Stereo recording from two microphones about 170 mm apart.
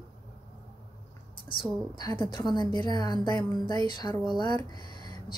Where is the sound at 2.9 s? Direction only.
25° left (ahead or behind).